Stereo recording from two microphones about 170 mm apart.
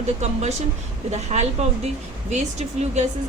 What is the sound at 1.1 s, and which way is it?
Speech, 40° right (ahead or behind).